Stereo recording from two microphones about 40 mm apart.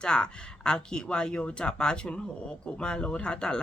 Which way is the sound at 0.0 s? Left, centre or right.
Centre.